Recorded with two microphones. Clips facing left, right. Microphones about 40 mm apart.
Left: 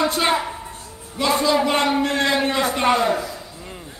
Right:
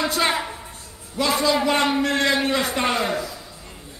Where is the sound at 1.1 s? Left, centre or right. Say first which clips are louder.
Left 2 dB; centre.